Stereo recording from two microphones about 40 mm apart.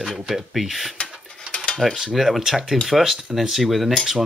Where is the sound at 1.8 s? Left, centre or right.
Centre.